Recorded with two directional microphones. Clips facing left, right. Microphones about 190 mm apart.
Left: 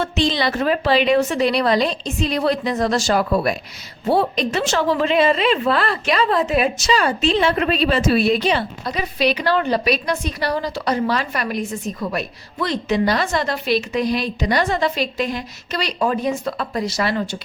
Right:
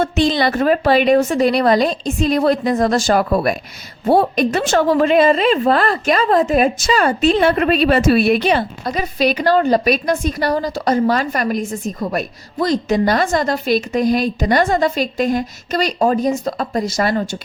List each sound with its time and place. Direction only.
0.0 s a woman's voice: 50° right (ahead or behind)